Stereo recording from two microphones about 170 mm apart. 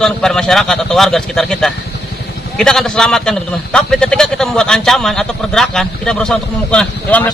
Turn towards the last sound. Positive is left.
turn(degrees=5)  # may be behind; listen again after turning